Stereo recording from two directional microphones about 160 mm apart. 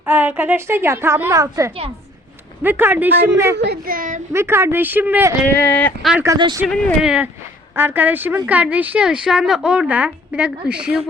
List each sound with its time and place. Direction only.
0.0 s a woman's voice: 10° right (ahead or behind)
3.6 s a child's voice: 80° right; by 4.2 s 60° right (ahead or behind)
4.3 s a woman's voice: 15° right (ahead or behind)
5.5 s speech: 10° left (ahead or behind)
6.2 s speech: 25° right (ahead or behind)
6.7 s a woman's voice: 5° right (ahead or behind)